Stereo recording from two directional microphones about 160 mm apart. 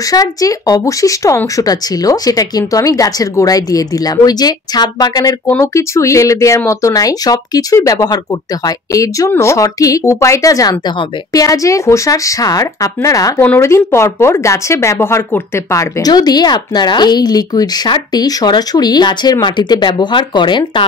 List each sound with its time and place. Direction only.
0.1 s speech: 20° left (ahead or behind)